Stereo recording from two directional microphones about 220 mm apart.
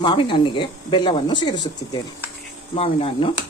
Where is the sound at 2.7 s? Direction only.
25° left (ahead or behind).